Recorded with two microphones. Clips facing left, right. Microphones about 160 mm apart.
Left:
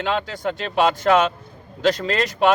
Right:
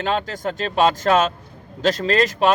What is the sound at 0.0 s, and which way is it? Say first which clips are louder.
Speech: even; 40° right (ahead or behind).